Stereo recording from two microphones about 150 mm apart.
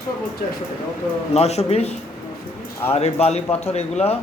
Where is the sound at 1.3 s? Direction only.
45° left (ahead or behind).